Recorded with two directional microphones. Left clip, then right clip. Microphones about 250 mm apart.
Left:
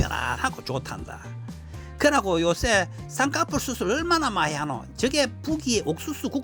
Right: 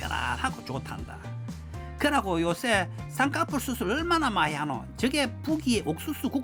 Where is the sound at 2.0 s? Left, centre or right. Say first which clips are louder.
Left 5 dB; centre.